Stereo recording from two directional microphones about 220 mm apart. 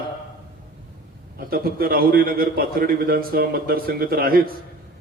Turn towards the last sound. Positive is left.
turn(degrees=-40)  # may be behind; listen again after turning